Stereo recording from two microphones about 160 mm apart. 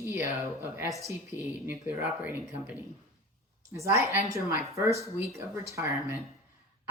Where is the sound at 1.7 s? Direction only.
10° right (ahead or behind).